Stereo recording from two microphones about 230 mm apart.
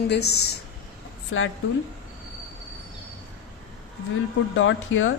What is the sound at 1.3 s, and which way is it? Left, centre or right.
Speech, left.